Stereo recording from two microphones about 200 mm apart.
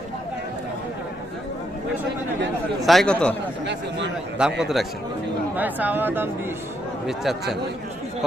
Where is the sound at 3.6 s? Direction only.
60° right (ahead or behind).